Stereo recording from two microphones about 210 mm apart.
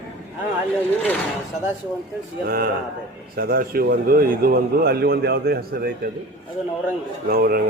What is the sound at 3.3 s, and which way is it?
A man's voice, 45° right (ahead or behind).